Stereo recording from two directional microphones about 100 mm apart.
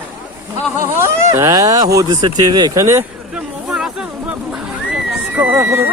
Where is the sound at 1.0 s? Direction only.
30° right (ahead or behind).